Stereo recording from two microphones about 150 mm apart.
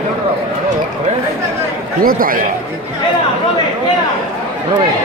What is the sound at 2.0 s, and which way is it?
Speech, 70° right (ahead or behind).